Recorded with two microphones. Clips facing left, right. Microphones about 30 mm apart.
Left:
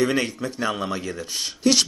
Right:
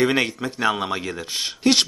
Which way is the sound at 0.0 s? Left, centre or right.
Right.